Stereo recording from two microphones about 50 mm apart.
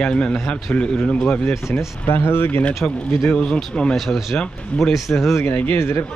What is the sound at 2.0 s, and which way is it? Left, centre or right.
Speech, left.